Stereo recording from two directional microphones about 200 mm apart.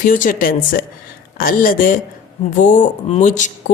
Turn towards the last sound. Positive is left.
turn(degrees=40)  # may be behind; listen again after turning